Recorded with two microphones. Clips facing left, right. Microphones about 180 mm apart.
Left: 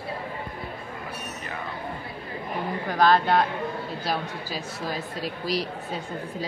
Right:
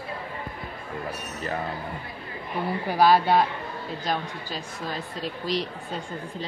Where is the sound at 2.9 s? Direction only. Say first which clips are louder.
Right 1 dB; 10° right (ahead or behind).